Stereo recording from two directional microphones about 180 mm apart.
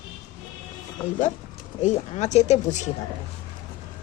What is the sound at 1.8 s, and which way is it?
Speech, 40° left (ahead or behind).